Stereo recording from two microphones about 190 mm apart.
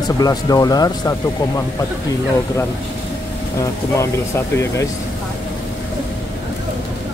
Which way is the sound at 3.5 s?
15° left (ahead or behind).